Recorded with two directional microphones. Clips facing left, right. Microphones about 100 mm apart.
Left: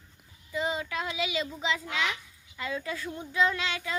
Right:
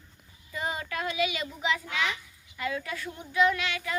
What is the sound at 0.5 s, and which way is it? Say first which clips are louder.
Speech: left 2 dB; 20° left (ahead or behind).